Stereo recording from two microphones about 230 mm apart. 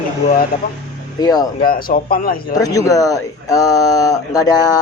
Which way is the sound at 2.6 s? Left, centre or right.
Centre.